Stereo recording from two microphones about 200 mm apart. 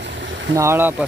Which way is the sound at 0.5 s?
10° right (ahead or behind).